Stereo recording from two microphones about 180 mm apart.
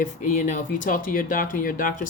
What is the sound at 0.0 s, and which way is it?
Speech, 45° left (ahead or behind).